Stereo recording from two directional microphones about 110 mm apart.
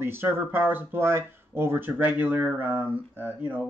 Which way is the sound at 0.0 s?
20° right (ahead or behind).